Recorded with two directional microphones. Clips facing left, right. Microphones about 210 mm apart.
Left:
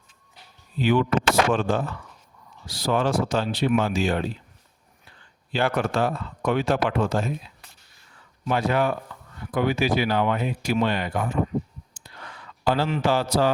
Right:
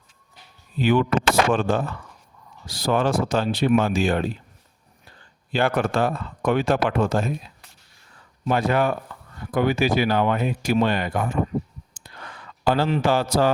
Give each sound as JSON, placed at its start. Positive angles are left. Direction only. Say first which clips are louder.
{"t": 0.8, "sound": "speech", "louder": "right 1 dB", "side_deg": -55}
{"t": 11.9, "sound": "clicking", "louder": "right 2 dB", "side_deg": -50}
{"t": 12.9, "sound": "speech", "louder": "right 2 dB", "side_deg": -45}